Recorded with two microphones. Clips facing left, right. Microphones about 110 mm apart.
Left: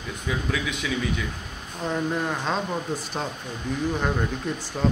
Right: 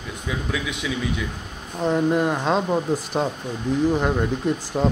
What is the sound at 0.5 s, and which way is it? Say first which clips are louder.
Speech: right 2 dB; 10° right (ahead or behind).